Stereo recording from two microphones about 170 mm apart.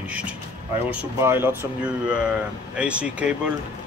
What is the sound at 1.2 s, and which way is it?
Speech, 15° right (ahead or behind).